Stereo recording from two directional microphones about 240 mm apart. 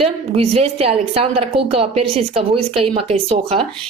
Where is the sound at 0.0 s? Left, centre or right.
Right.